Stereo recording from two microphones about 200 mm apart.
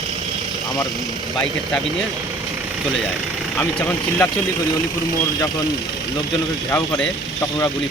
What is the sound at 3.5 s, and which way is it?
Speech, 10° left (ahead or behind).